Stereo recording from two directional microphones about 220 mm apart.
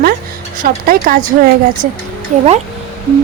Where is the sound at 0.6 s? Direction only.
40° right (ahead or behind).